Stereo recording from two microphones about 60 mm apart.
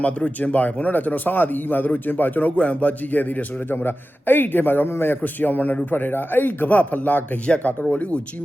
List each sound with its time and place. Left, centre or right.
0.0 s speech: left